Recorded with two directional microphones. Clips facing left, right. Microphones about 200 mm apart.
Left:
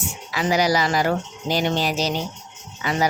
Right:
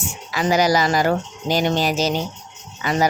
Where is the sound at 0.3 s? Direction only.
45° right (ahead or behind).